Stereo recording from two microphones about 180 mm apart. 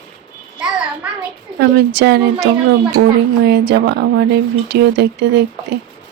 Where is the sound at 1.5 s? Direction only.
65° right (ahead or behind).